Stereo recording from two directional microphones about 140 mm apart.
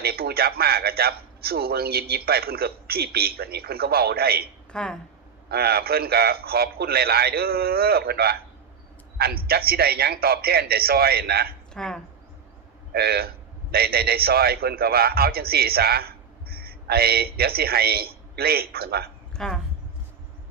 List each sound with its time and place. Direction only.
0.0 s a man's voice: 90° right
4.7 s a woman's voice: 5° left (ahead or behind)
5.5 s a man's voice: 90° right
11.7 s speech: 5° left (ahead or behind)
12.9 s a man's voice: 90° right
19.4 s speech: centre (ahead or behind)